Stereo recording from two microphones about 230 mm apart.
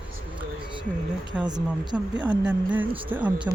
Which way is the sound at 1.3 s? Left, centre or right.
Centre.